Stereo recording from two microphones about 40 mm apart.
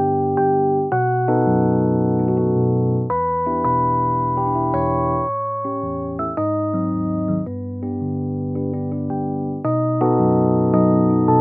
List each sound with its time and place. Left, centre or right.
0.0 s electric piano: centre
4.7 s music: centre
9.7 s electric piano: centre